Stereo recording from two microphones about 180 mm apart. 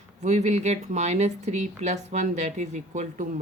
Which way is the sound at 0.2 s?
40° right (ahead or behind).